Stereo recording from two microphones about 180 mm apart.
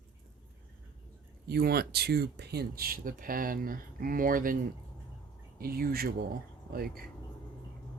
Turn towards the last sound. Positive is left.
turn(degrees=-55)  # may be behind; listen again after turning